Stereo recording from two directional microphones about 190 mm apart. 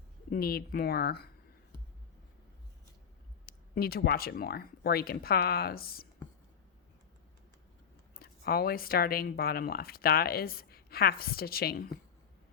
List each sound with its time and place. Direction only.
0.3 s speech: 55° left (ahead or behind)
3.4 s speech: 55° left (ahead or behind)
8.1 s speech: 55° left (ahead or behind)